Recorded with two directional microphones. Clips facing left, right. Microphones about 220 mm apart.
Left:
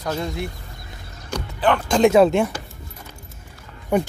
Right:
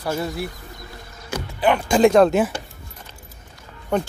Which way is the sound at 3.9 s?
10° left (ahead or behind).